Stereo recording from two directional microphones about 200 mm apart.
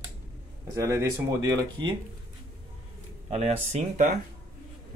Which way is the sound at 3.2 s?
35° right (ahead or behind).